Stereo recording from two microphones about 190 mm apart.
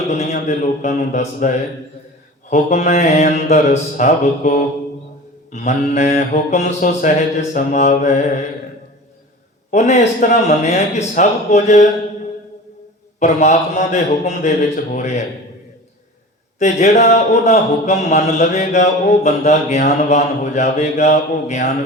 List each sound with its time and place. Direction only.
0.1 s speech: 35° left (ahead or behind)
9.7 s speech: 35° left (ahead or behind)
13.1 s speech: 40° left (ahead or behind)
16.6 s speech: 40° left (ahead or behind)